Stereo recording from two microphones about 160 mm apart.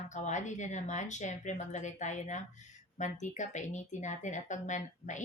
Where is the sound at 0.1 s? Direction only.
50° left (ahead or behind).